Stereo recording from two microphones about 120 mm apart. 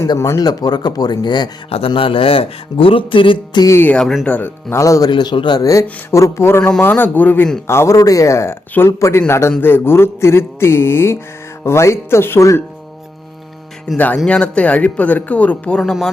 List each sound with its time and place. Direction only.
0.0 s speech: 25° left (ahead or behind)
1.9 s speech: 50° left (ahead or behind)
3.7 s speech: 15° left (ahead or behind)
4.3 s mantra: 15° left (ahead or behind)
5.1 s speech: 40° left (ahead or behind)
6.1 s mantra: 25° left (ahead or behind)
6.6 s speech: 10° left (ahead or behind)
7.7 s mantra: 25° left (ahead or behind)
13.8 s speech: 10° left (ahead or behind)
15.8 s speech: centre (ahead or behind)